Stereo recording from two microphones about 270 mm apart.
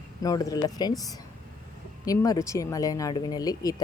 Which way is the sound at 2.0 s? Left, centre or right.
Centre.